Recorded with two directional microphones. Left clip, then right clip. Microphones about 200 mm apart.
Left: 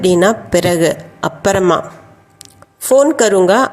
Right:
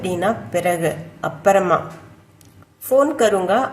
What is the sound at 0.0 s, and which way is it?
A woman's voice, 45° left (ahead or behind).